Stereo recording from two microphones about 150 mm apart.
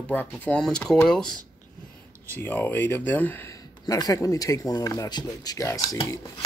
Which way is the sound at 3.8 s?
25° left (ahead or behind).